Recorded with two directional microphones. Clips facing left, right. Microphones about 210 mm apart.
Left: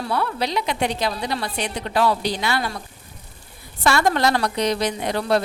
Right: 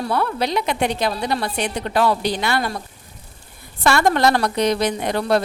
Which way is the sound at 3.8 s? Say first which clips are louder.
Right 2 dB; 55° right (ahead or behind).